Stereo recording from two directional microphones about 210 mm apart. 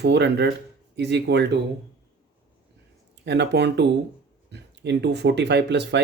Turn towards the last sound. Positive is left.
turn(degrees=-55)  # may be behind; listen again after turning